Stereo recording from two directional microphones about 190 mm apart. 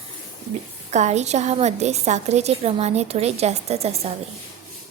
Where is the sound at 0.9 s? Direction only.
35° right (ahead or behind).